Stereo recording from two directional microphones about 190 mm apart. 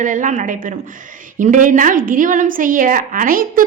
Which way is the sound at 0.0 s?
40° right (ahead or behind).